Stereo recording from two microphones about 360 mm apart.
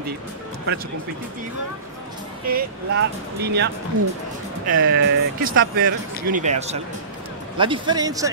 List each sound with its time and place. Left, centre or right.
2.4 s speech: right
7.5 s speech: centre